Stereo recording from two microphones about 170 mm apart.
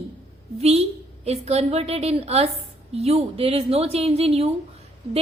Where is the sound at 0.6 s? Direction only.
35° right (ahead or behind).